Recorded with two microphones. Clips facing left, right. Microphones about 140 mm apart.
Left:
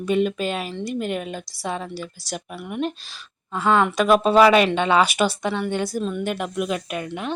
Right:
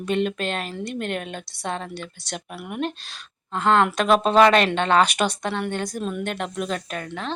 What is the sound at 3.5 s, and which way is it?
A woman's voice, 5° left (ahead or behind).